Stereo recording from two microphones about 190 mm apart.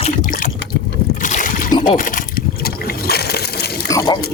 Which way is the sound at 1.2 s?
45° left (ahead or behind).